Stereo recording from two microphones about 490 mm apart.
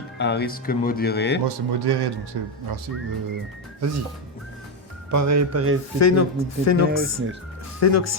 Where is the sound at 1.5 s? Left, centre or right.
Right.